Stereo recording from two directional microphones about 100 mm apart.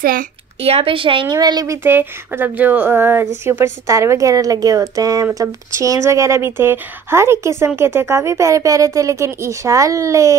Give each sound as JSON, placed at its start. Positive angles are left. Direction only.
{"t": 0.6, "sound": "speech", "side_deg": -80}
{"t": 1.3, "sound": "speech", "side_deg": -40}
{"t": 1.8, "sound": "speech", "side_deg": -20}